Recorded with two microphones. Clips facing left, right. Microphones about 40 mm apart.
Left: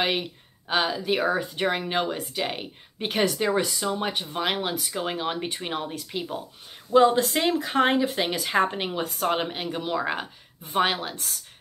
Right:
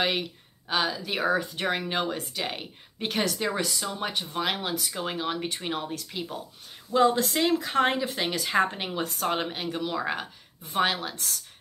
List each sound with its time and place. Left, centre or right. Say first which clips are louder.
0.0 s speech: left 1 dB; centre